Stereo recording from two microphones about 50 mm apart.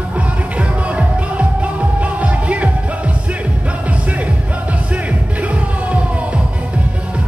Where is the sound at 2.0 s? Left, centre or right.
Right.